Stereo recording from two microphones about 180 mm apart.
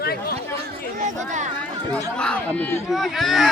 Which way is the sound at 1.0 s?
40° right (ahead or behind).